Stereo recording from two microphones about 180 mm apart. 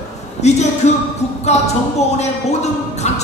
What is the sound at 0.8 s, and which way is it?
A woman's voice, 40° left (ahead or behind).